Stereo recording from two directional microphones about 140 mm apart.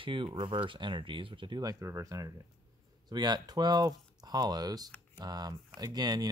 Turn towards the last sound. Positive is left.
turn(degrees=-30)  # may be behind; listen again after turning